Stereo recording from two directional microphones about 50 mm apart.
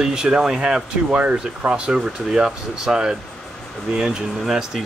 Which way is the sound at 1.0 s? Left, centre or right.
Right.